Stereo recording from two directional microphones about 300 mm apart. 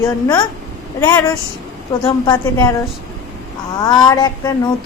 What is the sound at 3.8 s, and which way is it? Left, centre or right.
Speech, centre.